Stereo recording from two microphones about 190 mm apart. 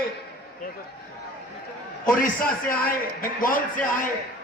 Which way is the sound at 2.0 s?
45° left (ahead or behind).